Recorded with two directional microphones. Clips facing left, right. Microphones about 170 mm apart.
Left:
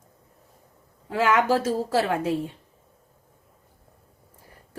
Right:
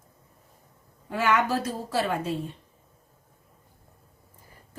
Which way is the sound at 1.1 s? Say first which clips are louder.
Left 3 dB; 90° left.